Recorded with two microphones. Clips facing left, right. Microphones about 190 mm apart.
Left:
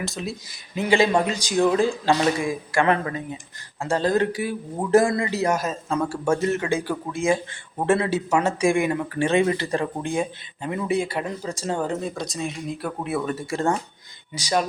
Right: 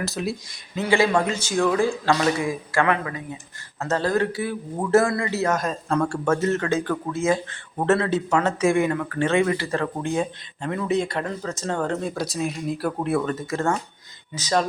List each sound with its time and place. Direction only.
0.0 s speech: centre (ahead or behind)
0.8 s speech: 20° left (ahead or behind)
2.8 s a man's voice: 30° left (ahead or behind)
3.8 s speech: 15° left (ahead or behind)
13.2 s speech: 10° left (ahead or behind)